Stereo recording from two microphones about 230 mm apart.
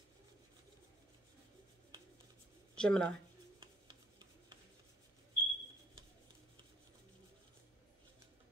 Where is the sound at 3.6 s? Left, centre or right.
Centre.